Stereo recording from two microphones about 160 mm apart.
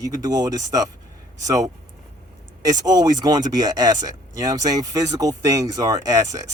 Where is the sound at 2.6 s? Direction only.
25° right (ahead or behind).